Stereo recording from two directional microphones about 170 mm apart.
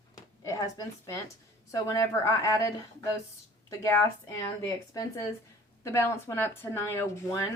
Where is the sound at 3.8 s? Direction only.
15° left (ahead or behind).